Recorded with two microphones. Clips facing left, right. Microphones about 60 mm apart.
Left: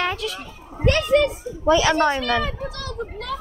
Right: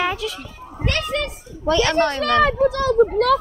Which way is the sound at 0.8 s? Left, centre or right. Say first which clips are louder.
Left 6 dB; left.